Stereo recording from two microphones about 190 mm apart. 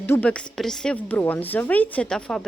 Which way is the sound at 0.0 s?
10° left (ahead or behind).